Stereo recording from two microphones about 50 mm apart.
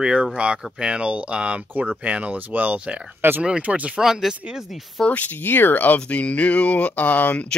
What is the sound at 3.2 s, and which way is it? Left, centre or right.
Speech, right.